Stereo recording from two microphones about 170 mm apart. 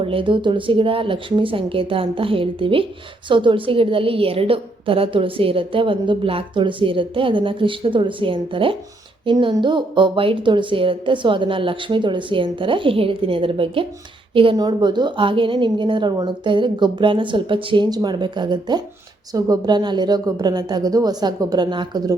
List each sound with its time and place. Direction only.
0.0 s a woman's voice: 30° right (ahead or behind)